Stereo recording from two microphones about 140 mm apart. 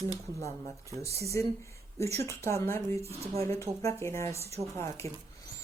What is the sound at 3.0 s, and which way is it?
Speech, 45° right (ahead or behind).